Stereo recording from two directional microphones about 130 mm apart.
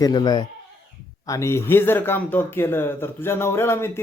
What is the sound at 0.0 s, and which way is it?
Speech, 30° left (ahead or behind).